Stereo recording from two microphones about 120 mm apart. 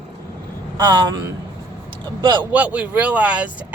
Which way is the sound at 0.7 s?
30° right (ahead or behind).